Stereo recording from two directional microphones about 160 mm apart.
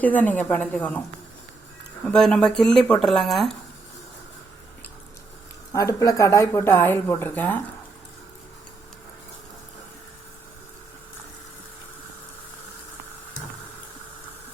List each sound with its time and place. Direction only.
0.0 s speech: 10° left (ahead or behind)
2.0 s speech: 5° left (ahead or behind)
5.7 s speech: 20° left (ahead or behind)